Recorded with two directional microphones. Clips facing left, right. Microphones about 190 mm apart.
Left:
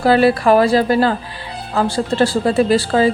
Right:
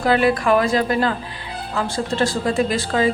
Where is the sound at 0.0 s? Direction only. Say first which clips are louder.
Left 4 dB; 35° left (ahead or behind).